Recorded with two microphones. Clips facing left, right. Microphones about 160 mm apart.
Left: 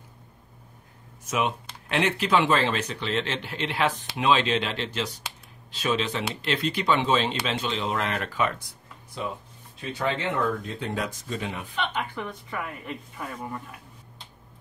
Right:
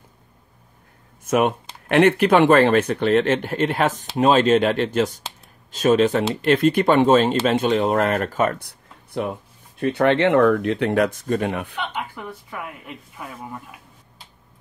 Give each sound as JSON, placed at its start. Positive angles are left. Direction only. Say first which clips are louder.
{"t": 1.2, "sound": "speech", "louder": "right 8 dB", "side_deg": -55}
{"t": 8.6, "sound": "speech", "louder": "even", "side_deg": -60}
{"t": 12.0, "sound": "speech", "louder": "even", "side_deg": -10}